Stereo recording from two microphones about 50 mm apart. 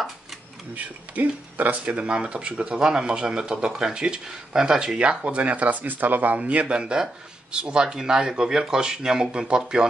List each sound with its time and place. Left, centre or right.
0.7 s speech: right; by 9.6 s centre